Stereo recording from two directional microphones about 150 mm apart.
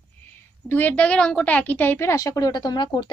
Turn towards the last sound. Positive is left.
turn(degrees=30)  # may be behind; listen again after turning